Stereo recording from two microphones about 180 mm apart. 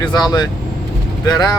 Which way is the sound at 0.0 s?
25° left (ahead or behind).